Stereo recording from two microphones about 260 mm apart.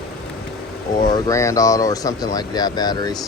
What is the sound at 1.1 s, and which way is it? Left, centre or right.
Speech, centre.